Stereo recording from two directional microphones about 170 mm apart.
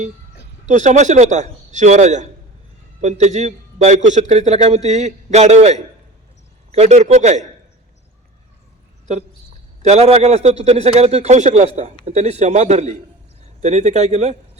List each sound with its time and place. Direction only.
0.6 s a man's voice: 45° right (ahead or behind)
9.8 s a man's voice: 40° right (ahead or behind)